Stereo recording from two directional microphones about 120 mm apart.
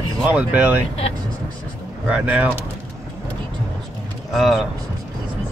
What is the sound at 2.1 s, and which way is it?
Speech, 10° right (ahead or behind).